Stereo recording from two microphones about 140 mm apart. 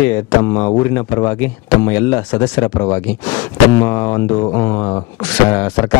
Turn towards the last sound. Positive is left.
turn(degrees=15)  # may be behind; listen again after turning